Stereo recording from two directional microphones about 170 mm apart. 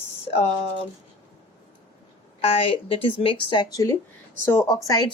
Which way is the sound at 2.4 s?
35° left (ahead or behind).